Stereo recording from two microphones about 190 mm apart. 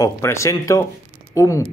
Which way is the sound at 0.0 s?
15° left (ahead or behind).